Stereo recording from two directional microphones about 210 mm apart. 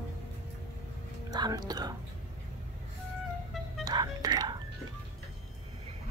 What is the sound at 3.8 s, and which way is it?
Music, 20° right (ahead or behind).